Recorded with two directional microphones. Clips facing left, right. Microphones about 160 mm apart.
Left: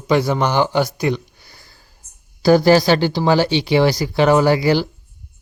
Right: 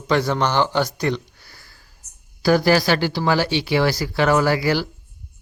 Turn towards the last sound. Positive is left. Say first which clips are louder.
# left 4 dB
turn(degrees=20)  # may be behind; listen again after turning